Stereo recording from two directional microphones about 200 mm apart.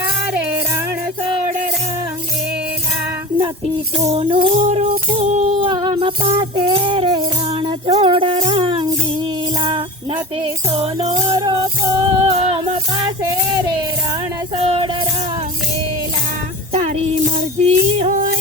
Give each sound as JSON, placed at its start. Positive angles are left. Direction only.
{"t": 3.9, "sound": "music", "side_deg": -30}
{"t": 14.6, "sound": "music", "side_deg": -25}
{"t": 16.7, "sound": "music", "side_deg": -30}